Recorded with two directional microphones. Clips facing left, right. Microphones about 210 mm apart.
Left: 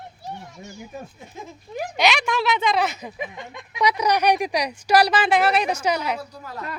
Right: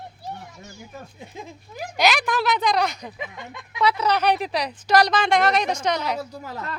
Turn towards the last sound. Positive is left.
turn(degrees=-25)  # may be behind; listen again after turning